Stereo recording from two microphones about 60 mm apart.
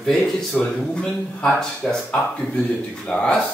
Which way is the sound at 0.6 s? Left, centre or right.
Centre.